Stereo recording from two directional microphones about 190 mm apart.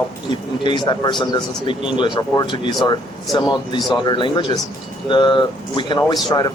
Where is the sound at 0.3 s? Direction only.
25° left (ahead or behind).